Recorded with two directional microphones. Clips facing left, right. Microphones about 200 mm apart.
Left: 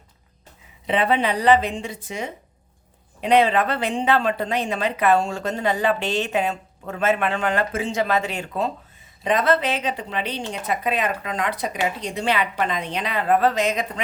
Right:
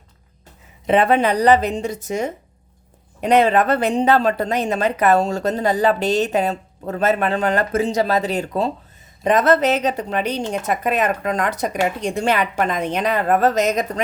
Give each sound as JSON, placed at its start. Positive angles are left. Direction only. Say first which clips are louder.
{"t": 0.9, "sound": "a woman's voice", "louder": "right 5 dB", "side_deg": -45}